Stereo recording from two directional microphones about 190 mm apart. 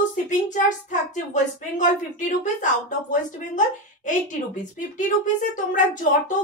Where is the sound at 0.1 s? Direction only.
40° left (ahead or behind).